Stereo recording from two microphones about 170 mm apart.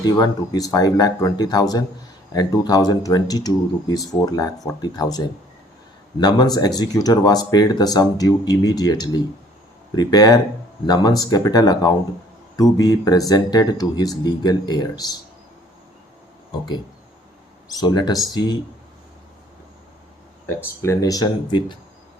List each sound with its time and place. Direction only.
0.0 s speech: 20° left (ahead or behind)
17.7 s speech: 25° left (ahead or behind)
20.6 s speech: 15° left (ahead or behind)